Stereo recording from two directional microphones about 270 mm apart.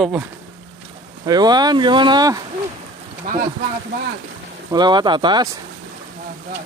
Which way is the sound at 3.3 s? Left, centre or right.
Right.